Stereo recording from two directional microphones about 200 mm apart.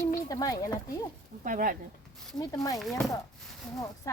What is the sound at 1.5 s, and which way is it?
Speech, 45° right (ahead or behind).